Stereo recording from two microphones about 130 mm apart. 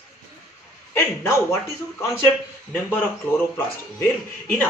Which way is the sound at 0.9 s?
20° left (ahead or behind).